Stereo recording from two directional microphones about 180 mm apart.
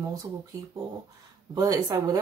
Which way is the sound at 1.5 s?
20° right (ahead or behind).